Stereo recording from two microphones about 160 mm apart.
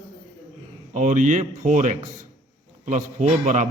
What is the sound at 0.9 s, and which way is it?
A man's voice, 50° right (ahead or behind).